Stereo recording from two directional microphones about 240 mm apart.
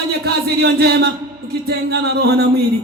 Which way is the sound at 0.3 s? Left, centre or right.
Right.